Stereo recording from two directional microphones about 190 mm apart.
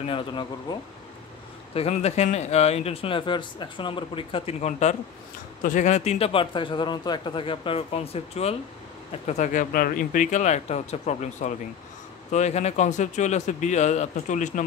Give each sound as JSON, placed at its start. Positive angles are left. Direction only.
{"t": 0.0, "sound": "speech", "side_deg": 25}